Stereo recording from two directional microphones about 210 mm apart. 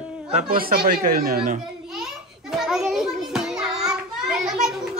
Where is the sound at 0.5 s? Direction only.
45° right (ahead or behind).